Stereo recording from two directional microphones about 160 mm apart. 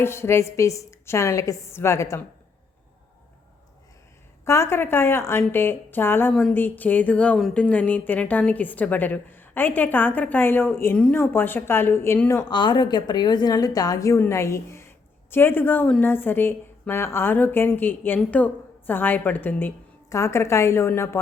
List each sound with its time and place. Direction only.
0.0 s a woman's voice: 15° left (ahead or behind)
4.4 s a woman's voice: 15° left (ahead or behind)